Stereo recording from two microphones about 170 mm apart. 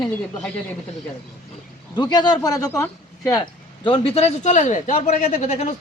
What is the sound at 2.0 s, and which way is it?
Speech, 25° left (ahead or behind).